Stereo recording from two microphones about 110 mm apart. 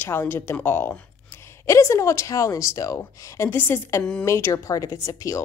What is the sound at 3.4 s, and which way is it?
A woman's voice, 20° left (ahead or behind).